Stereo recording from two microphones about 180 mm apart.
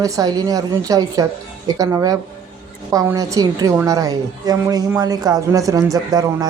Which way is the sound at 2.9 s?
20° right (ahead or behind).